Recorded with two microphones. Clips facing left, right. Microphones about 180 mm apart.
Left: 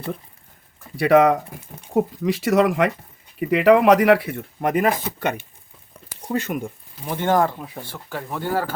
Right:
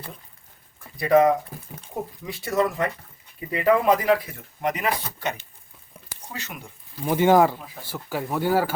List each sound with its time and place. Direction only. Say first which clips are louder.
0.9 s speech: left 3 dB; 75° left (ahead or behind)
2.0 s speech: left 12 dB; 90° left; by 6.7 s 55° left (ahead or behind)
7.1 s speech: right 3 dB; 10° right (ahead or behind)